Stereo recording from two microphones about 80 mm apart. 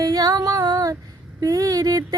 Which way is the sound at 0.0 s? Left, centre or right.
Right.